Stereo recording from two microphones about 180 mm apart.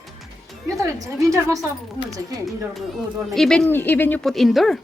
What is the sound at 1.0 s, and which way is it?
Speech, 20° right (ahead or behind).